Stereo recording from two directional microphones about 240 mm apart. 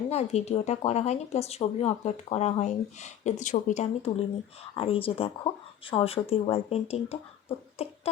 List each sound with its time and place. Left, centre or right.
0.1 s speech: left